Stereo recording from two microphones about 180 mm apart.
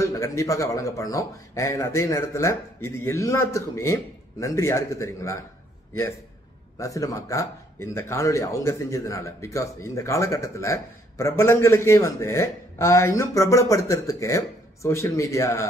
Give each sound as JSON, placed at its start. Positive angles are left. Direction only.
{"t": 0.0, "sound": "a man's voice", "side_deg": 15}
{"t": 6.8, "sound": "a man's voice", "side_deg": 20}